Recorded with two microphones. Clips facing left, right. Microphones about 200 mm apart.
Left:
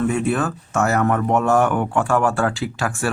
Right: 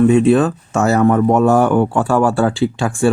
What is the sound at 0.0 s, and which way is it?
Speech, 25° right (ahead or behind).